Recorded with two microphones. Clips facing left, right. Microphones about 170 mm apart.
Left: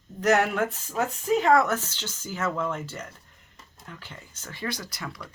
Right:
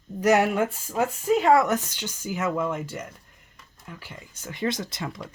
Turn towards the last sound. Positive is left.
turn(degrees=-25)  # may be behind; listen again after turning